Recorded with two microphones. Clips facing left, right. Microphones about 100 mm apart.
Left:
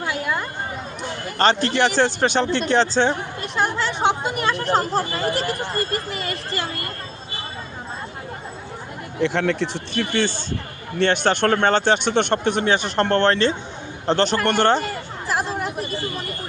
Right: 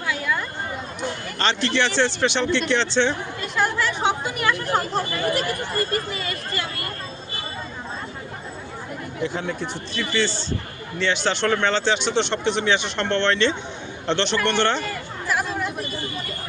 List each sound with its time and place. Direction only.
1.4 s speech: 45° left (ahead or behind)
3.6 s chatter: 25° left (ahead or behind)
4.4 s speech: 30° left (ahead or behind)
9.2 s speech: 80° left
10.0 s speech: 50° left (ahead or behind)
15.3 s chatter: 35° left (ahead or behind)